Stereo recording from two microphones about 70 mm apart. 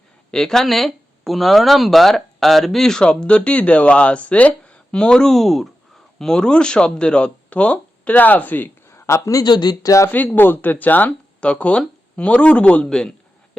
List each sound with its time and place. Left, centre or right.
0.3 s speech: centre; by 8.7 s left
8.9 s a sound: left
9.4 s speech: left
10.3 s speech: left; by 13.6 s centre